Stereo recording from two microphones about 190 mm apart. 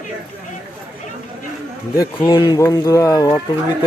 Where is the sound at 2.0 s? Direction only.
20° left (ahead or behind).